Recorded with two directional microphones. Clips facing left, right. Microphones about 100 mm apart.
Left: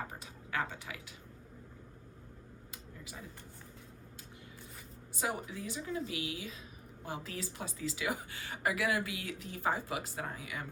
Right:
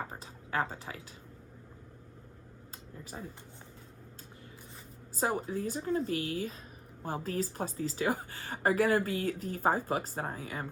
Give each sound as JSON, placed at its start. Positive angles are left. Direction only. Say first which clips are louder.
{"t": 0.1, "sound": "speech", "louder": "right 4 dB", "side_deg": -35}
{"t": 2.7, "sound": "a sound", "louder": "right 5 dB", "side_deg": -40}
{"t": 5.1, "sound": "a woman's voice", "louder": "right 6 dB", "side_deg": -40}